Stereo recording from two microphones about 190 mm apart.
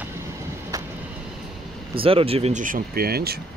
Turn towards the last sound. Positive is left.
turn(degrees=-55)  # may be behind; listen again after turning